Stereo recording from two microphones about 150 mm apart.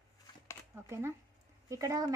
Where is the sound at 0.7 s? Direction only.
15° right (ahead or behind).